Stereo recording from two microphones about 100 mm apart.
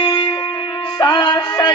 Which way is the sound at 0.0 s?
55° left (ahead or behind).